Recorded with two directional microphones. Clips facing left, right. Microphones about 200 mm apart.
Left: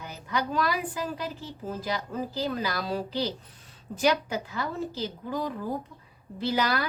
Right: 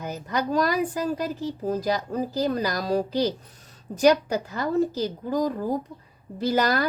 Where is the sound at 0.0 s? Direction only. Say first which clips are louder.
Right 4 dB; 45° right (ahead or behind).